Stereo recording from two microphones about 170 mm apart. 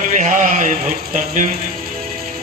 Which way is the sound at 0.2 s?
50° right (ahead or behind).